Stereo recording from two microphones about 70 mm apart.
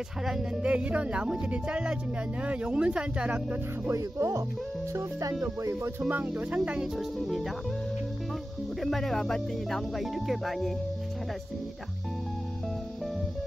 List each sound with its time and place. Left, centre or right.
0.2 s speech: centre
0.6 s speech: centre
4.2 s speech: right
6.0 s speech: right
7.0 s speech: centre
8.8 s speech: centre